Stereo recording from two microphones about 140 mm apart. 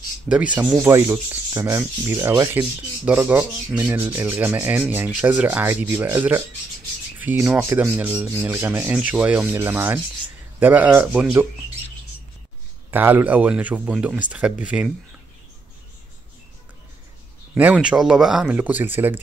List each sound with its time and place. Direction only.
0.7 s rub: 20° right (ahead or behind)
3.1 s speech: 15° right (ahead or behind)
12.9 s speech: 15° right (ahead or behind)
17.6 s speech: 10° right (ahead or behind)